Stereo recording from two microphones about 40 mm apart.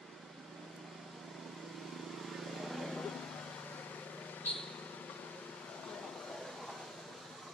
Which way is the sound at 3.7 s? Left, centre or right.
Left.